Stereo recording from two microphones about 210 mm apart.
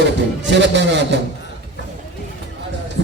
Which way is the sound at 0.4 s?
55° right (ahead or behind).